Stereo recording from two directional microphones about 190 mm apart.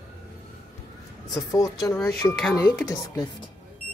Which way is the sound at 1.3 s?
20° left (ahead or behind).